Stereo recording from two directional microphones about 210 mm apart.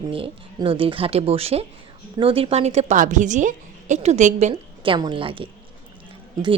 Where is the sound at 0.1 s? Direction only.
25° right (ahead or behind).